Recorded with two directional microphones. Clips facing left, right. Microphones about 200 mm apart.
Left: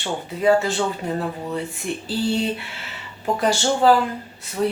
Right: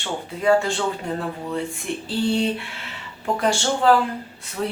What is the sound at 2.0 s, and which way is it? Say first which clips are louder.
Speech: right 1 dB; centre (ahead or behind).